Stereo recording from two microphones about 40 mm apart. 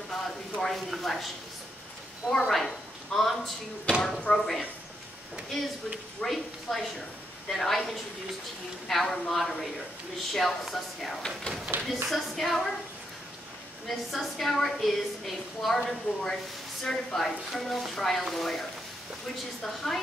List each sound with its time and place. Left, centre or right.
0.1 s a sound: centre
0.8 s a woman's voice: centre
2.3 s a woman's voice: centre
8.8 s a woman's voice: centre
11.7 s speech: right
12.1 s a woman's voice: centre
13.8 s a woman's voice: centre